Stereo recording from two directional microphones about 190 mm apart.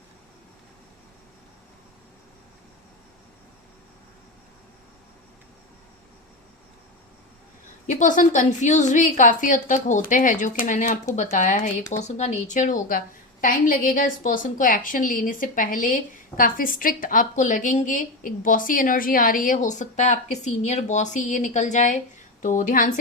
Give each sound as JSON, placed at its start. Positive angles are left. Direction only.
{"t": 7.9, "sound": "a woman's voice", "side_deg": 40}